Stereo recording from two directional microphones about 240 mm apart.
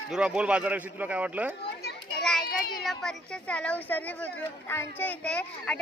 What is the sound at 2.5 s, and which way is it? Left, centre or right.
Speech, left.